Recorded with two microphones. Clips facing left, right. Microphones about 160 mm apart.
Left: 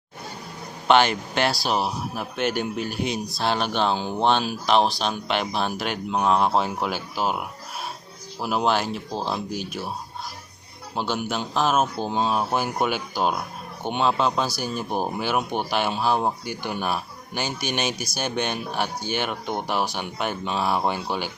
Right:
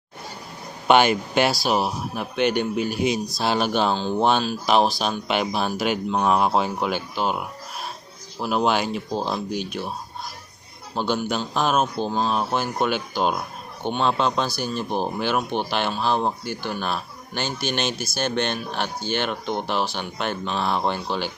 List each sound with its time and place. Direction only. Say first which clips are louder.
0.9 s a man's voice: right 2 dB; 10° right (ahead or behind); by 9.8 s 5° left (ahead or behind)
10.9 s speech: right 2 dB; 5° left (ahead or behind)